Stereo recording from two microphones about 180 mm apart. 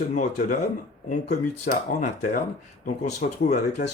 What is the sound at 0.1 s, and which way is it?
Speech, 45° left (ahead or behind).